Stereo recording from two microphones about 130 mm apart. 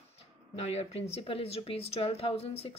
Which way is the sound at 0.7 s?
50° left (ahead or behind).